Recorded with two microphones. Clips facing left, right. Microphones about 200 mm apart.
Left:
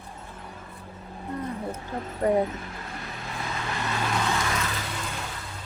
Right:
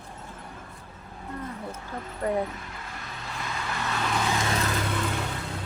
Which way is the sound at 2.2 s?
25° left (ahead or behind).